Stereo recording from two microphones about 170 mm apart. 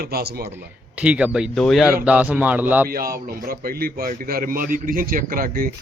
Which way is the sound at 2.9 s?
60° right (ahead or behind).